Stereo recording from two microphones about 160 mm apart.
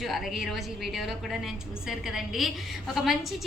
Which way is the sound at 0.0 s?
Centre (ahead or behind).